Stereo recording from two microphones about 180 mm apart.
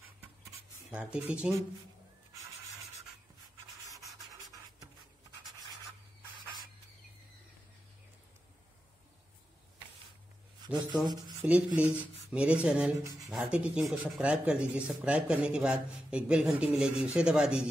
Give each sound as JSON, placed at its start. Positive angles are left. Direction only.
{"t": 0.9, "sound": "speech", "side_deg": -5}
{"t": 4.0, "sound": "sanding", "side_deg": -20}
{"t": 11.4, "sound": "speech", "side_deg": -5}